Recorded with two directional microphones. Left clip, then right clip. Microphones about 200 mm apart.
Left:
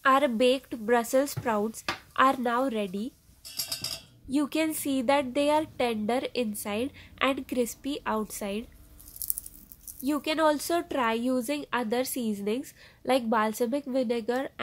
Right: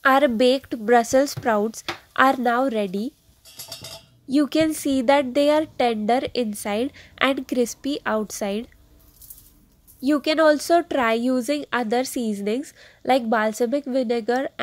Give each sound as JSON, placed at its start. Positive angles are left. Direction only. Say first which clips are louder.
{"t": 0.0, "sound": "a woman's voice", "louder": "right 6 dB", "side_deg": -20}
{"t": 4.3, "sound": "a woman's voice", "louder": "right 8 dB", "side_deg": -20}
{"t": 10.0, "sound": "a woman's voice", "louder": "right 8 dB", "side_deg": -20}